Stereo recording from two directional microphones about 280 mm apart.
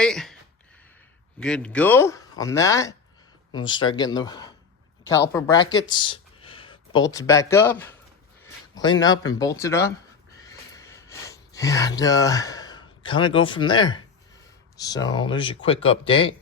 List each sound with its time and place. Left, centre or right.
0.0 s speech: centre
1.4 s a man's voice: centre
10.4 s a sound: centre
14.8 s speech: centre